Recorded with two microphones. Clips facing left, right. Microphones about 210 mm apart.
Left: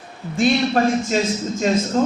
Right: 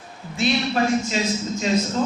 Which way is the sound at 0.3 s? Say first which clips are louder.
Left 4 dB; 50° left (ahead or behind).